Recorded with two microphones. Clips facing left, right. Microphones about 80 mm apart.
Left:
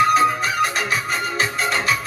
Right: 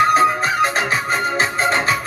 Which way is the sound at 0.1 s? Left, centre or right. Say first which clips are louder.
Right 2 dB; right.